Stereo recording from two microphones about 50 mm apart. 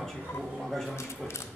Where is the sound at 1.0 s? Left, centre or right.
Left.